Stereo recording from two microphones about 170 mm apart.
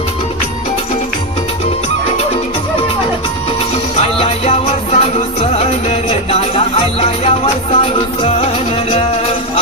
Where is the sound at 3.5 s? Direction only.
35° left (ahead or behind).